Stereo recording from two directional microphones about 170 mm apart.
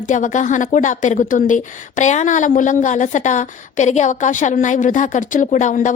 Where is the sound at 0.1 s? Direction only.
50° left (ahead or behind).